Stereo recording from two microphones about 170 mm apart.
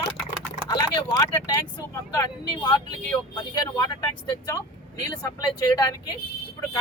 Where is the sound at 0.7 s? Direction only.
25° left (ahead or behind).